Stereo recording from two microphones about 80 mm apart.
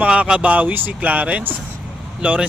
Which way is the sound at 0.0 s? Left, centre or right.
Centre.